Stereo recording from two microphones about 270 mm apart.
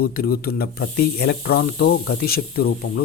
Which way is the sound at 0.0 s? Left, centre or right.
Left.